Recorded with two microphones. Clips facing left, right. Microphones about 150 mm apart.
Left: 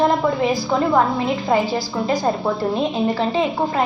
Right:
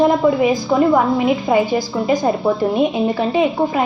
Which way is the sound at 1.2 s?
Centre (ahead or behind).